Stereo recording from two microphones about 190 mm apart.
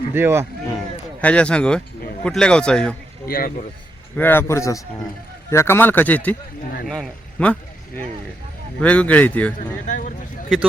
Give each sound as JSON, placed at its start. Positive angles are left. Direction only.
{"t": 0.1, "sound": "speech", "side_deg": -10}
{"t": 1.2, "sound": "a man's voice", "side_deg": 5}
{"t": 3.2, "sound": "speech", "side_deg": 50}
{"t": 4.2, "sound": "a man's voice", "side_deg": 10}
{"t": 9.6, "sound": "speech", "side_deg": 45}